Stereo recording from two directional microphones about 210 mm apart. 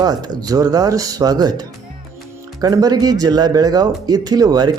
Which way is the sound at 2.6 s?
20° right (ahead or behind).